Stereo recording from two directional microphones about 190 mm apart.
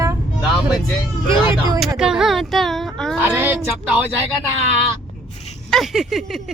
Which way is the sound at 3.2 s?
10° right (ahead or behind).